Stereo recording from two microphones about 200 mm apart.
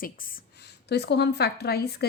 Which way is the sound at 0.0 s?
45° left (ahead or behind).